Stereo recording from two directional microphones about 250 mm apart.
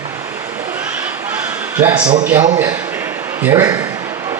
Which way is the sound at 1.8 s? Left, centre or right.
Centre.